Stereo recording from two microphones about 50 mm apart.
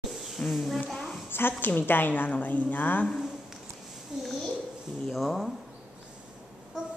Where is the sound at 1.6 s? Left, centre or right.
Left.